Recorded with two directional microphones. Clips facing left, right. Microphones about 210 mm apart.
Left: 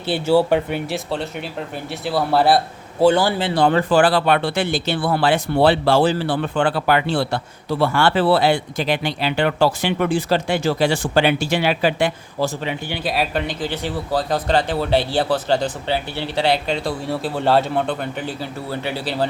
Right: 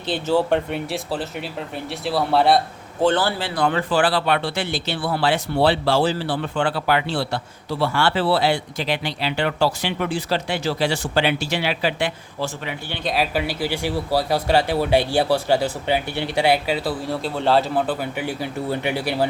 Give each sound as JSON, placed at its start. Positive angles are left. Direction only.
{"t": 0.1, "sound": "speech", "side_deg": 10}
{"t": 12.9, "sound": "speech", "side_deg": 0}